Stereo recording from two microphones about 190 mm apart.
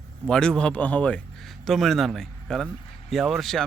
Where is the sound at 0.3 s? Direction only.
5° left (ahead or behind).